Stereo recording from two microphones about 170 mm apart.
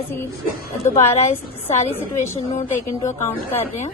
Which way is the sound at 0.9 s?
40° left (ahead or behind).